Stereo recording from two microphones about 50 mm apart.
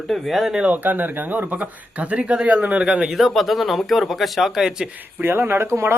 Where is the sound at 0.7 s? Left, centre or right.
Right.